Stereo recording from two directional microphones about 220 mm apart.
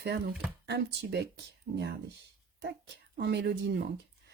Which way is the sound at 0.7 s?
50° right (ahead or behind).